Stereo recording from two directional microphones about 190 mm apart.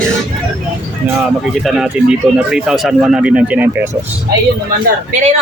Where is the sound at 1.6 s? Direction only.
Centre (ahead or behind).